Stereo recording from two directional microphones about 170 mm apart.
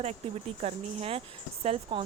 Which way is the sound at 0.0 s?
40° right (ahead or behind).